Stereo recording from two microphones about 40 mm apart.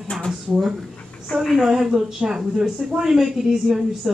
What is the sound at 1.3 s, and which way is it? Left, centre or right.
Speech, left.